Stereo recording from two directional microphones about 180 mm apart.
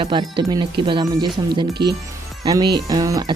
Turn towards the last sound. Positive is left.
turn(degrees=-20)  # may be behind; listen again after turning